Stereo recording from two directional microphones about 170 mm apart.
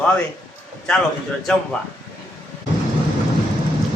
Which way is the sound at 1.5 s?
5° left (ahead or behind).